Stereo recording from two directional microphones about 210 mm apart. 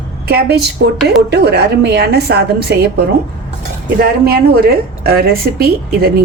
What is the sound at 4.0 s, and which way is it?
Speech, 45° right (ahead or behind).